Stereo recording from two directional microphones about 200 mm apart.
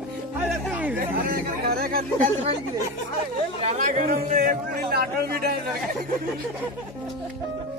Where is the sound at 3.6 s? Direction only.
40° right (ahead or behind).